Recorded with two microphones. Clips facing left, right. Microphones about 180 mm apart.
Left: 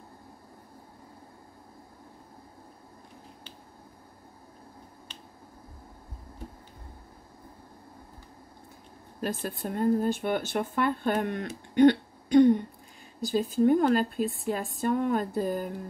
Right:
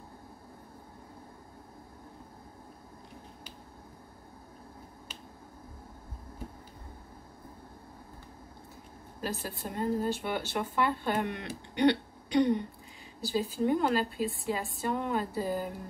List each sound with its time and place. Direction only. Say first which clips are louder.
9.2 s speech: left 4 dB; 50° left (ahead or behind)
11.7 s throat clearing: left 6 dB; 45° left (ahead or behind)
13.2 s speech: left 6 dB; 50° left (ahead or behind)